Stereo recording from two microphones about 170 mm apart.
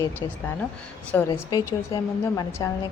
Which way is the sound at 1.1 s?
10° left (ahead or behind).